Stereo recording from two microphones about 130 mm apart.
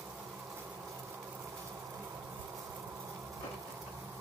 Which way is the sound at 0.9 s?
25° right (ahead or behind).